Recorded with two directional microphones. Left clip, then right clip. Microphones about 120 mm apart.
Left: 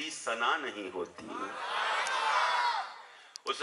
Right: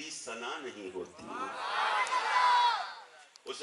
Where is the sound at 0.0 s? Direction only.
25° left (ahead or behind).